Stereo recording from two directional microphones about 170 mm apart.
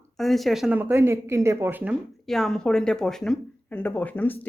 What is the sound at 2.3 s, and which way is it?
Speech, centre (ahead or behind).